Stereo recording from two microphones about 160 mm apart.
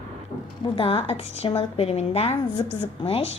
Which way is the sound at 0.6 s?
35° left (ahead or behind).